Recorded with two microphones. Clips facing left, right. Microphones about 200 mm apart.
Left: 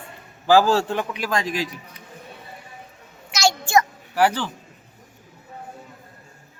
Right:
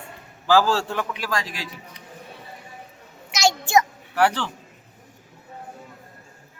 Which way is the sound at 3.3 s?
20° right (ahead or behind).